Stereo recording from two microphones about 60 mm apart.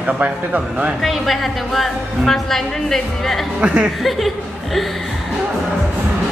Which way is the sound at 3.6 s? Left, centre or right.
Centre.